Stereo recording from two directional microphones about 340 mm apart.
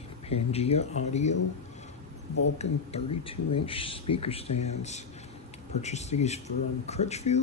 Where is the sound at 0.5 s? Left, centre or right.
Centre.